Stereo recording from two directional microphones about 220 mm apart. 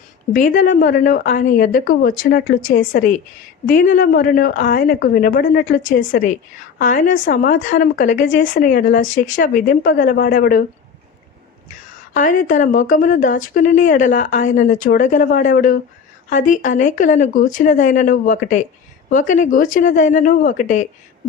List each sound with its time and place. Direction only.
0.3 s a woman's voice: 35° left (ahead or behind)
12.1 s a woman's voice: 35° left (ahead or behind)